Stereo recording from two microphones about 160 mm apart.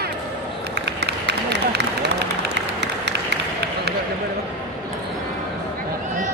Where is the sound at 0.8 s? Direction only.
90° right.